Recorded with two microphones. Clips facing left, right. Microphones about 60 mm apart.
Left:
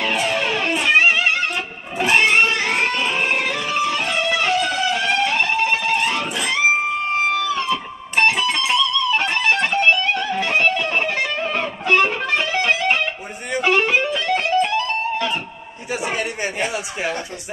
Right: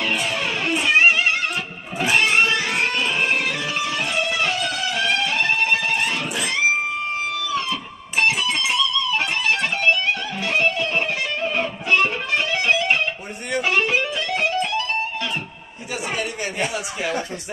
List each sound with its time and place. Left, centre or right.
0.0 s music: centre
1.0 s music: left
3.4 s music: left
7.5 s music: left